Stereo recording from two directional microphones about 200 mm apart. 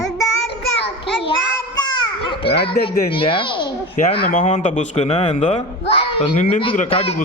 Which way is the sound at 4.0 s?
40° left (ahead or behind).